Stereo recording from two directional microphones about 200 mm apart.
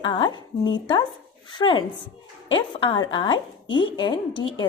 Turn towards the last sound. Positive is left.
turn(degrees=25)  # may be behind; listen again after turning